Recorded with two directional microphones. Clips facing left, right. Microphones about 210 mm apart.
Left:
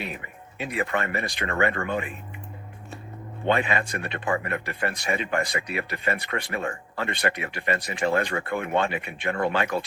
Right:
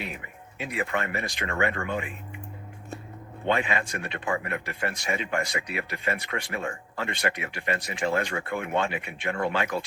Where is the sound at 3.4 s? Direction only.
55° left (ahead or behind).